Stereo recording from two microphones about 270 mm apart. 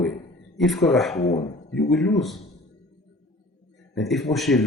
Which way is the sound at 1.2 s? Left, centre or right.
Left.